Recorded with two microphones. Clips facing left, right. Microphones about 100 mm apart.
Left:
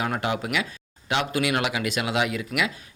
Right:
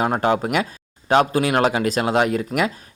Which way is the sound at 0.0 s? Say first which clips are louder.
Right 7 dB; 40° right (ahead or behind).